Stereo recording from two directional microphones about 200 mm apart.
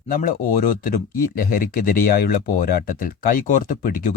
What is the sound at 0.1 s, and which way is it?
Speech, 45° left (ahead or behind).